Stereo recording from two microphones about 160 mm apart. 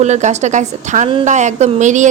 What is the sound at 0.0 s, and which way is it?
Speech, 45° right (ahead or behind).